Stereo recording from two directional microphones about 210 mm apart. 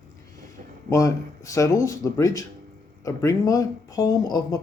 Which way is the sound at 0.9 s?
15° left (ahead or behind).